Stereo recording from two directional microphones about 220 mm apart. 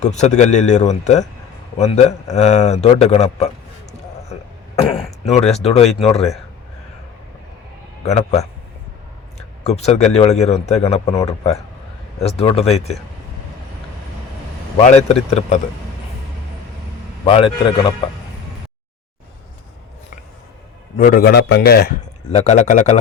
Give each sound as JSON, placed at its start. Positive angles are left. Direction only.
{"t": 0.0, "sound": "a man's voice", "side_deg": 30}
{"t": 5.2, "sound": "speech", "side_deg": 30}
{"t": 8.0, "sound": "speech", "side_deg": 30}
{"t": 9.6, "sound": "speech", "side_deg": 30}
{"t": 12.2, "sound": "speech", "side_deg": 25}
{"t": 14.8, "sound": "speech", "side_deg": 30}
{"t": 17.2, "sound": "speech", "side_deg": 25}
{"t": 20.9, "sound": "a man's voice", "side_deg": 40}
{"t": 22.3, "sound": "a man's voice", "side_deg": 30}